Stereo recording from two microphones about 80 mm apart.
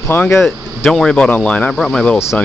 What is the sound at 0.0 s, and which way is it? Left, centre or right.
Speech, left.